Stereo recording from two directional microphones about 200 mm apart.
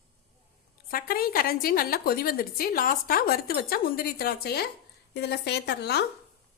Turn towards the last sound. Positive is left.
turn(degrees=55)  # may be behind; listen again after turning